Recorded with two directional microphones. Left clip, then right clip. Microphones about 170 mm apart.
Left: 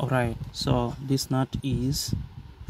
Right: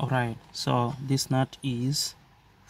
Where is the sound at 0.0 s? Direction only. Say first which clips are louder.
Left 2 dB; 15° left (ahead or behind).